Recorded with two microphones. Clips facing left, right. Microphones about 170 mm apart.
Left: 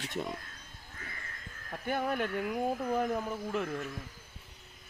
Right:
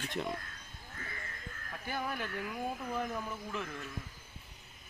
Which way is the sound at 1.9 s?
55° left (ahead or behind).